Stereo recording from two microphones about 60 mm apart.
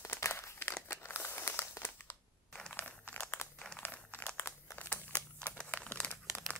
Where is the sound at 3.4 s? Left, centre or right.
Left.